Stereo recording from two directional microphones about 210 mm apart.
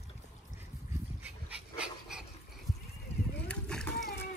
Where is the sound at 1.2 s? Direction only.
5° right (ahead or behind).